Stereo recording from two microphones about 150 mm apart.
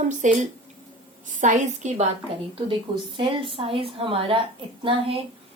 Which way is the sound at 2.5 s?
35° right (ahead or behind).